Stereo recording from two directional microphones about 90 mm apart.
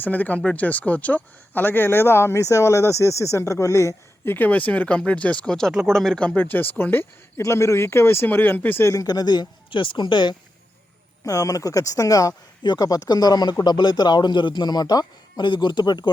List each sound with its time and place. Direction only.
0.0 s speech: 20° left (ahead or behind)
8.9 s speech: 45° left (ahead or behind); by 10.3 s 60° left (ahead or behind)
11.3 s a man's voice: 40° left (ahead or behind)